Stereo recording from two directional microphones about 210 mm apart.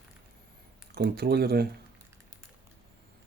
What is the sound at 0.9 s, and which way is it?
Speech, 45° right (ahead or behind).